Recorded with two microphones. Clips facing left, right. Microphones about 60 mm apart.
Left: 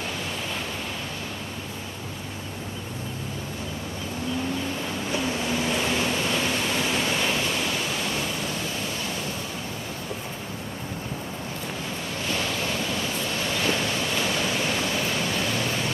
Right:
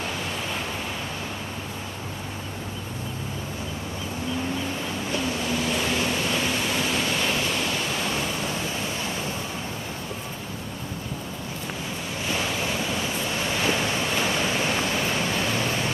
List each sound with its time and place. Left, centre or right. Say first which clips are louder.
5.8 s pink noise: even; centre
12.3 s waves: right 1 dB; centre